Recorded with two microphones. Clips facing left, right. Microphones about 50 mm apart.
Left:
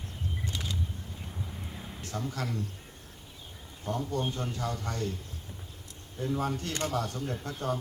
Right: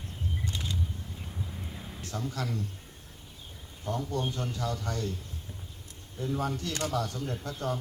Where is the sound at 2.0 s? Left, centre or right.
Left.